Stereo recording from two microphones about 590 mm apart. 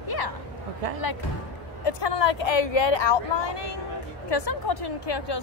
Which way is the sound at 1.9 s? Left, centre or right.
Left.